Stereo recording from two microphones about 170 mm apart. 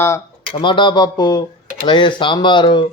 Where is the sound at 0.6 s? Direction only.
30° left (ahead or behind).